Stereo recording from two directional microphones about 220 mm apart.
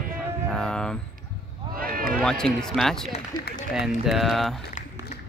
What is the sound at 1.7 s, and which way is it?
Run, 40° right (ahead or behind).